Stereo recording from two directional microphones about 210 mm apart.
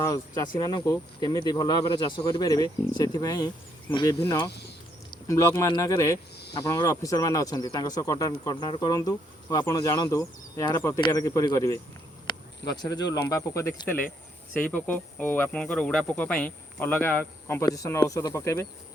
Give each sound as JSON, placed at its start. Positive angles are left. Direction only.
{"t": 0.0, "sound": "speech", "side_deg": 15}